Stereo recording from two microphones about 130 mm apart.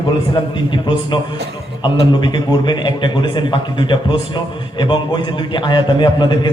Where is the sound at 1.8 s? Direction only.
35° left (ahead or behind).